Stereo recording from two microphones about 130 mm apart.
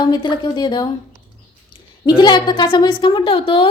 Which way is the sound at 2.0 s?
35° left (ahead or behind).